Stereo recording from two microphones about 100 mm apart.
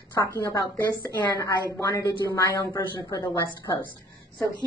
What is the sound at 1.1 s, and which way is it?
A woman's voice, 35° left (ahead or behind).